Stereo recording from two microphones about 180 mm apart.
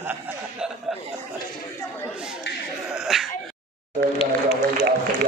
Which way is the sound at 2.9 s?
Centre (ahead or behind).